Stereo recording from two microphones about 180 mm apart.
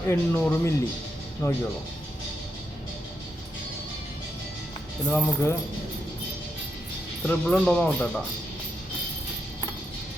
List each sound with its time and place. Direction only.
0.1 s speech: 10° left (ahead or behind)
5.0 s speech: 10° left (ahead or behind)
7.3 s speech: 5° left (ahead or behind)